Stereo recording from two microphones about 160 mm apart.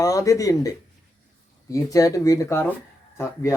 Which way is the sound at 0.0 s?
20° left (ahead or behind).